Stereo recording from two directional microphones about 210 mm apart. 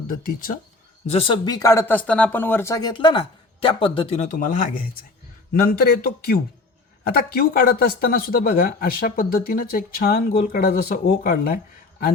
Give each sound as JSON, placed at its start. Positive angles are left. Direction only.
{"t": 0.2, "sound": "speech", "side_deg": 40}
{"t": 1.0, "sound": "speech", "side_deg": 25}